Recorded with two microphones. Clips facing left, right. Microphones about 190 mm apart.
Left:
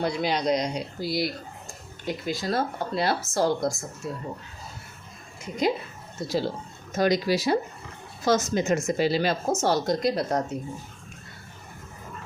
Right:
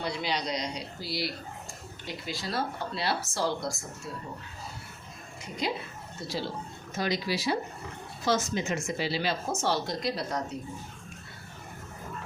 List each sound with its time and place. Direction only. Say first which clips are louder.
0.0 s speech: left 7 dB; 50° left (ahead or behind)
5.6 s speech: left 7 dB; 45° left (ahead or behind)